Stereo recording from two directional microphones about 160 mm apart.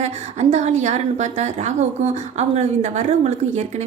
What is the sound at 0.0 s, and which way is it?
A woman's voice, 45° right (ahead or behind).